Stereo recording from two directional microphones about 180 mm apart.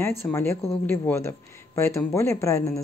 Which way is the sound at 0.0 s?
15° left (ahead or behind).